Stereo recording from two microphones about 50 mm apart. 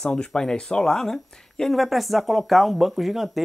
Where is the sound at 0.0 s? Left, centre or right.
Centre.